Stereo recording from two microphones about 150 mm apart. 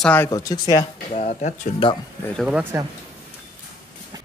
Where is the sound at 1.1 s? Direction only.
50° left (ahead or behind).